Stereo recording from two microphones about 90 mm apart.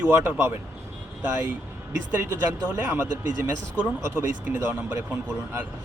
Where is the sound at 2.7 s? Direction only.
25° right (ahead or behind).